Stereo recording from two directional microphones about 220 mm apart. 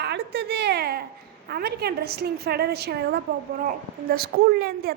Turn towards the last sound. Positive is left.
turn(degrees=-45)  # may be behind; listen again after turning